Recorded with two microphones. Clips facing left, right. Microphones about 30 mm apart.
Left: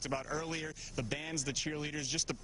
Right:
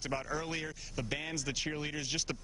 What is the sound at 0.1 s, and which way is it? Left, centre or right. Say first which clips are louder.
Speech: right 1 dB; centre.